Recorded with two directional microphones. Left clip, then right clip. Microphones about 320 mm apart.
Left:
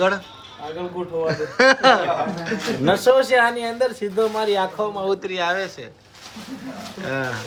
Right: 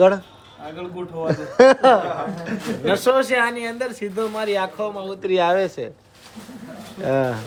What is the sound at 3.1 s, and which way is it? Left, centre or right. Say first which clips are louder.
Speech: left 3 dB; centre.